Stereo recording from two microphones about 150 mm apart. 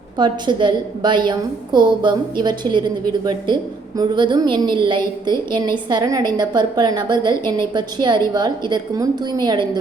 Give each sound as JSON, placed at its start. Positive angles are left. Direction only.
{"t": 0.2, "sound": "a woman's voice", "side_deg": -30}